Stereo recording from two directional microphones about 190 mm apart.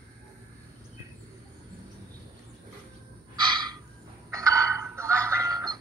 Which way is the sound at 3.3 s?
25° right (ahead or behind).